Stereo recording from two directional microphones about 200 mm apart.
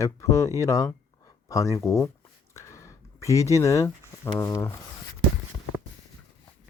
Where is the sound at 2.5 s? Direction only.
15° left (ahead or behind).